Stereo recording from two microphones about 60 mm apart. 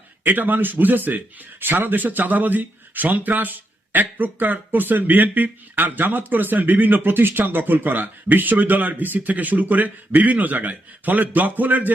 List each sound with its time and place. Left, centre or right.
0.3 s a man's voice: right